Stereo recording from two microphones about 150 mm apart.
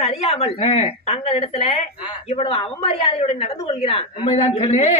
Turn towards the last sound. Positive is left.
turn(degrees=45)  # may be behind; listen again after turning